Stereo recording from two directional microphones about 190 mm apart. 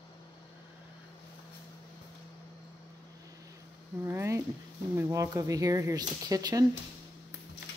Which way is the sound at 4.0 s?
10° right (ahead or behind).